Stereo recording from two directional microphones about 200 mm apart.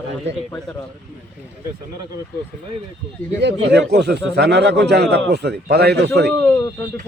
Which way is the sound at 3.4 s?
60° right (ahead or behind).